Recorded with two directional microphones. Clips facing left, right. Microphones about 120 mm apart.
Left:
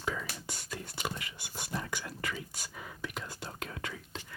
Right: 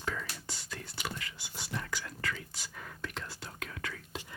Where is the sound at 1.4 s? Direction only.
55° left (ahead or behind).